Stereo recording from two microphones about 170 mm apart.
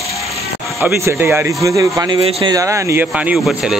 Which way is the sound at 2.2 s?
35° right (ahead or behind).